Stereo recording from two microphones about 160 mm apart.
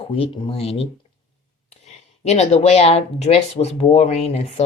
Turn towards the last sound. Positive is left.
turn(degrees=45)  # may be behind; listen again after turning